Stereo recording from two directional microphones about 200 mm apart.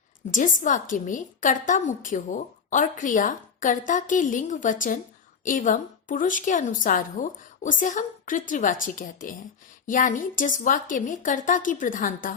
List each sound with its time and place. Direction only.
0.3 s a woman's voice: 40° left (ahead or behind)